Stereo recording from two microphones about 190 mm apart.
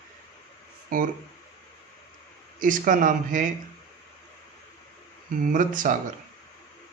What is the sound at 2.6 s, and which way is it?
Speech, 45° right (ahead or behind).